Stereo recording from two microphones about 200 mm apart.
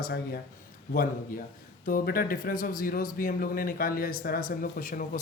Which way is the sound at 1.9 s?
45° left (ahead or behind).